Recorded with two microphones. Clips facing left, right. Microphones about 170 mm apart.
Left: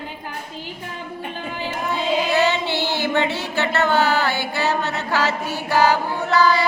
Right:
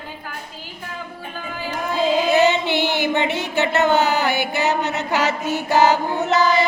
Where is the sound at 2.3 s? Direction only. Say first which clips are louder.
Right 3 dB; 20° right (ahead or behind).